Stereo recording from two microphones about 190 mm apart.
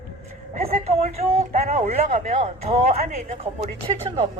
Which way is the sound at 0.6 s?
35° right (ahead or behind).